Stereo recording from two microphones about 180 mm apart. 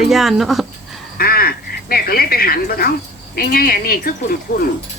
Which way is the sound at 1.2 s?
55° left (ahead or behind).